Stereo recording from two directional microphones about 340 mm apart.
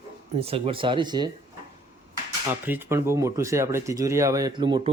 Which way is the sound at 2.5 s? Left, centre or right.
Centre.